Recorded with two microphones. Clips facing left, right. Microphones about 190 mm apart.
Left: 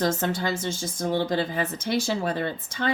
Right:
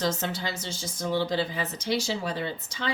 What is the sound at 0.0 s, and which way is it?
Speech, 50° left (ahead or behind).